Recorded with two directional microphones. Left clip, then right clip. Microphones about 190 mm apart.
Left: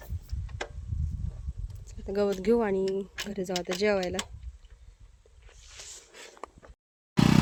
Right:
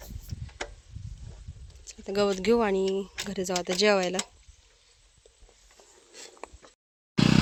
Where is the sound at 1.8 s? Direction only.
5° left (ahead or behind).